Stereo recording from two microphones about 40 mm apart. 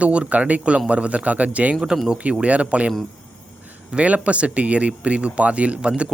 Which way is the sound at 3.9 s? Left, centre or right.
Right.